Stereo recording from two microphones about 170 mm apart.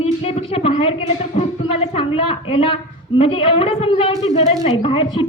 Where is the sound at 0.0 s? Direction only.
35° left (ahead or behind).